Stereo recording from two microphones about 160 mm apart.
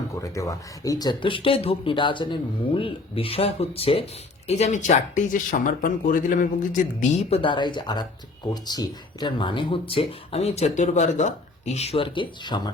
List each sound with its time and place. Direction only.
0.2 s speech: 20° left (ahead or behind)